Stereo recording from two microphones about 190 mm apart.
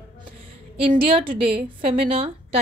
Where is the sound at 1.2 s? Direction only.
55° right (ahead or behind).